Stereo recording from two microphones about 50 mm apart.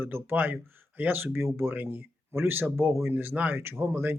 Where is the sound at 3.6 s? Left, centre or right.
Right.